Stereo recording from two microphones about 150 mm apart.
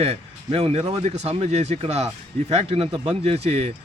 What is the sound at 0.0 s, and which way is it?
Speech, 40° right (ahead or behind).